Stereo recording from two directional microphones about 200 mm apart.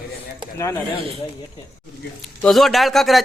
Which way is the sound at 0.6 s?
15° left (ahead or behind).